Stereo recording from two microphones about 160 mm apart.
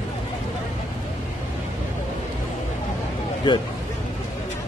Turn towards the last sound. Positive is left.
turn(degrees=30)  # may be behind; listen again after turning